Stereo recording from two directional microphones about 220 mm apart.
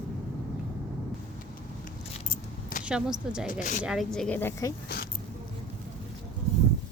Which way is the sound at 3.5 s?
35° left (ahead or behind).